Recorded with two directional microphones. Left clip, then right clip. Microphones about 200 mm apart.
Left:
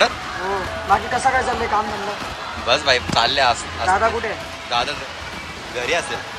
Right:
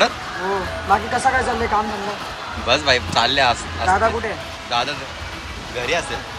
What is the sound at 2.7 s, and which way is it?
Speech, 10° left (ahead or behind).